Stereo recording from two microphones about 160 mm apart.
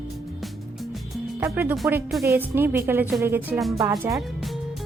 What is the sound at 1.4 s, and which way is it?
Speech, 10° right (ahead or behind).